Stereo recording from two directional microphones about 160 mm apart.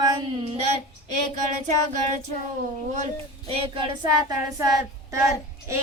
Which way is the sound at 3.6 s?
30° right (ahead or behind).